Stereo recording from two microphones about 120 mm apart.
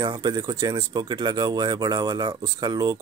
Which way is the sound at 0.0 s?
35° right (ahead or behind).